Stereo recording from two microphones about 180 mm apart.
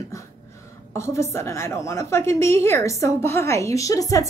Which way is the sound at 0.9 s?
15° left (ahead or behind).